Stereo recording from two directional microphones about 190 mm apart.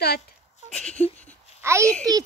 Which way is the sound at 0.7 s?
5° left (ahead or behind).